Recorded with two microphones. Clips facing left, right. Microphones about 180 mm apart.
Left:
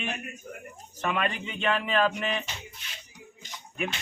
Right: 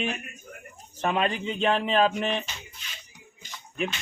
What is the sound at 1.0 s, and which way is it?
A man's voice, 35° right (ahead or behind).